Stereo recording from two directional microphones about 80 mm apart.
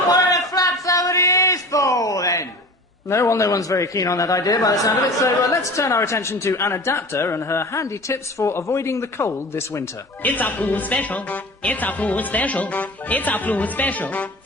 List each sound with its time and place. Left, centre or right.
0.1 s a sound: left
3.1 s a man's voice: left
5.7 s speech: left
10.2 s speech: left